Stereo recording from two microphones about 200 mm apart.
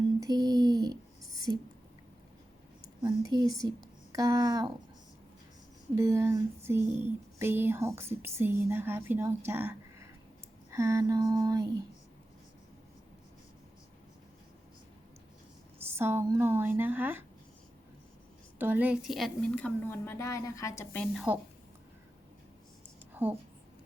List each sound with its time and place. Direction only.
0.2 s a sound: 20° right (ahead or behind)
1.5 s speech: 20° right (ahead or behind)
3.3 s speech: 20° right (ahead or behind)
5.9 s speech: 15° right (ahead or behind)
15.9 s speech: 10° right (ahead or behind)
18.6 s a woman's voice: 10° right (ahead or behind)
23.1 s a woman's voice: 10° right (ahead or behind)